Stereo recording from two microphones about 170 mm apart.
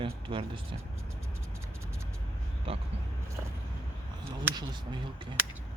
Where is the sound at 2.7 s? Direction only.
30° right (ahead or behind).